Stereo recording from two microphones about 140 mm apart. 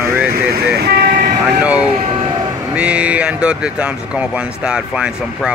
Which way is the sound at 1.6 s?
10° right (ahead or behind).